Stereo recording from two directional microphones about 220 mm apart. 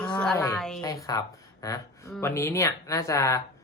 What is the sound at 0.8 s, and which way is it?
Speech, 15° left (ahead or behind).